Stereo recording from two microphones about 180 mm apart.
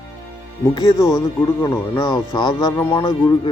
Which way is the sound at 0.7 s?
20° left (ahead or behind).